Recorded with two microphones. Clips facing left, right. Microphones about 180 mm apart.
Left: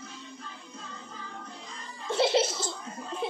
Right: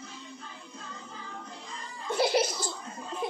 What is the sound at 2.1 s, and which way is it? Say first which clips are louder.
Music: left 1 dB; 25° left (ahead or behind).